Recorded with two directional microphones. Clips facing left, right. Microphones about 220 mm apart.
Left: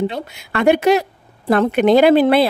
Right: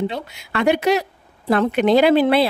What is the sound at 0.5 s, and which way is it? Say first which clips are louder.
A woman's voice: left 4 dB; 50° left (ahead or behind).